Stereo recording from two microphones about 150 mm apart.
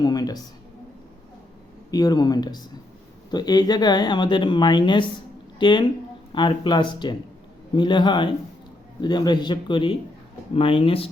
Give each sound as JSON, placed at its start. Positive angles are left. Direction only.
{"t": 0.0, "sound": "speech", "side_deg": 25}
{"t": 1.9, "sound": "a man's voice", "side_deg": 25}